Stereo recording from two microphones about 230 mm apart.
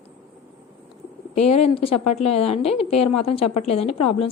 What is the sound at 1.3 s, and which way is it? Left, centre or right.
A woman's voice, left.